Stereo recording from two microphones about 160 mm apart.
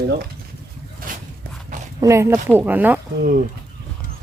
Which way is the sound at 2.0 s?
20° right (ahead or behind).